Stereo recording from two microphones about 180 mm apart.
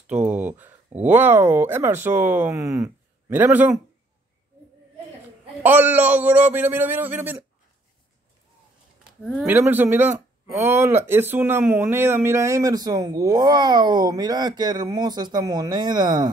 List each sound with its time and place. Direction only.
0.0 s speech: 5° right (ahead or behind)
5.6 s a man's voice: 10° right (ahead or behind)
9.0 s a sound: centre (ahead or behind)
9.5 s speech: 10° right (ahead or behind)